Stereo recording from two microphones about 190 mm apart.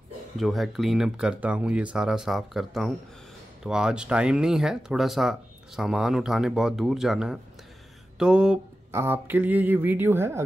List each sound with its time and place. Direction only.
0.4 s speech: centre (ahead or behind)